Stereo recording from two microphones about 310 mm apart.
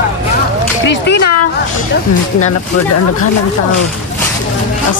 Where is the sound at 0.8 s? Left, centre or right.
Left.